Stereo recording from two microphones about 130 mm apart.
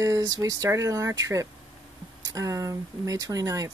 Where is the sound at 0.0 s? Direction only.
25° right (ahead or behind).